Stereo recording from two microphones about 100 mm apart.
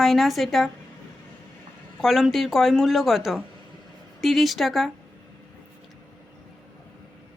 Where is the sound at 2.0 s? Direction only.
5° right (ahead or behind).